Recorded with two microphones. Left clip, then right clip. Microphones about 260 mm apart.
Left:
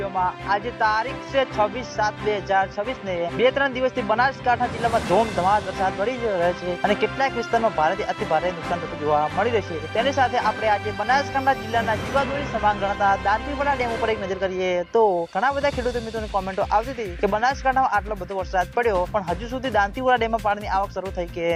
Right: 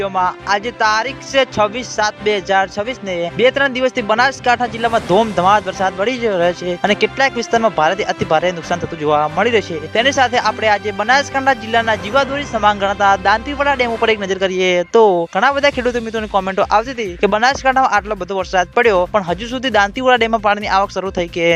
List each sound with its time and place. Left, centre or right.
0.0 s speech: right